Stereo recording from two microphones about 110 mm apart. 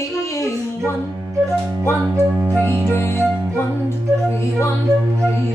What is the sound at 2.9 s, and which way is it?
Female singing, 20° left (ahead or behind).